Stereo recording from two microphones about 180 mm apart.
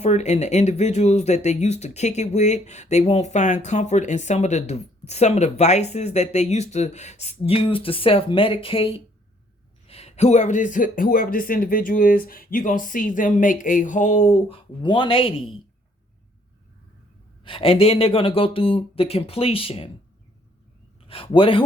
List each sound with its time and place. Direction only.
0.0 s speech: 40° left (ahead or behind)
17.4 s speech: 30° left (ahead or behind)
21.1 s speech: 30° left (ahead or behind)